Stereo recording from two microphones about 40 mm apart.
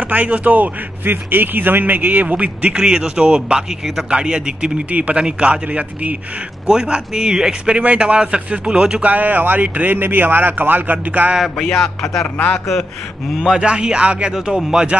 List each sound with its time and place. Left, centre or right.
0.0 s a man's voice: right
2.7 s a man's voice: centre; by 6.1 s right
6.7 s speech: centre
7.8 s a man's voice: right
9.0 s a man's voice: right
9.9 s a man's voice: right
11.5 s speech: centre
13.4 s a man's voice: centre